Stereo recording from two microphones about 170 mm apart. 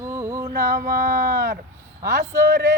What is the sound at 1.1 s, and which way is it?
Speech, 65° right (ahead or behind).